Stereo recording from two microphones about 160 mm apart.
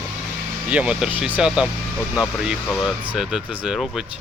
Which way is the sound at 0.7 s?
5° right (ahead or behind).